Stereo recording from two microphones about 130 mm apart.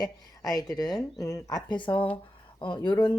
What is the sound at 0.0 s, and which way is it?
Speech, 30° left (ahead or behind).